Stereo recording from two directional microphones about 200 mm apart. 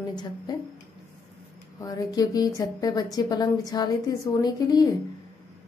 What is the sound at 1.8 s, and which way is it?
A woman's voice, 20° left (ahead or behind).